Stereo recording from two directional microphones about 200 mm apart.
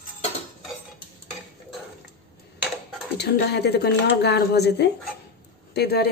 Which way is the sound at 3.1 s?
55° left (ahead or behind).